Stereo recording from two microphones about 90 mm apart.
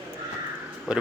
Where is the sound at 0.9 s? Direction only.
10° right (ahead or behind).